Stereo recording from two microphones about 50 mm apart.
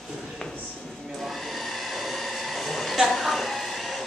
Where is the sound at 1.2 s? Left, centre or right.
Centre.